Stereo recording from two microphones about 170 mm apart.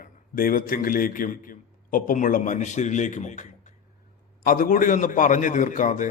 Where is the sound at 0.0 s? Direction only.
55° left (ahead or behind).